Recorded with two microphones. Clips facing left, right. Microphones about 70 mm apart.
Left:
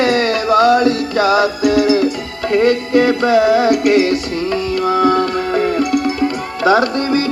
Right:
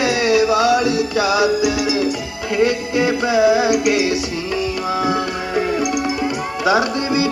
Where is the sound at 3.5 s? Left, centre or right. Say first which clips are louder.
Left 3 dB; centre.